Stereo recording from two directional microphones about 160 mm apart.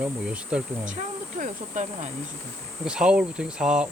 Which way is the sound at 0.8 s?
50° right (ahead or behind).